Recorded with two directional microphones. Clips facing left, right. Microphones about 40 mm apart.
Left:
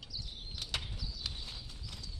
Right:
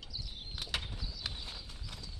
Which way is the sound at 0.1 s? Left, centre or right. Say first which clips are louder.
Right 1 dB; centre.